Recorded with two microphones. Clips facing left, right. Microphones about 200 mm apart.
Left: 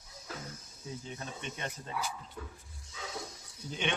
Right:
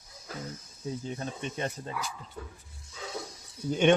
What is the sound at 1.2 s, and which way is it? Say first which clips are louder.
Speech: right 6 dB; 35° right (ahead or behind).